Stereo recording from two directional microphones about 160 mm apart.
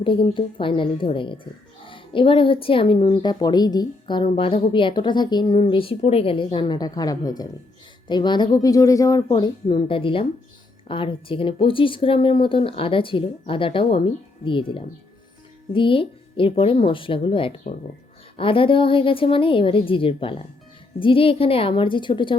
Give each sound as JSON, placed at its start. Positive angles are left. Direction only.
{"t": 0.0, "sound": "speech", "side_deg": 35}